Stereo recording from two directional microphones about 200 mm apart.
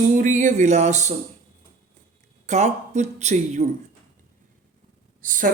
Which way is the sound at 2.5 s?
35° right (ahead or behind).